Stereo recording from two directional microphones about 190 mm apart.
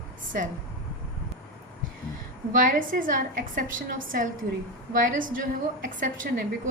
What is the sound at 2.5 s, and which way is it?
A woman's voice, 45° right (ahead or behind).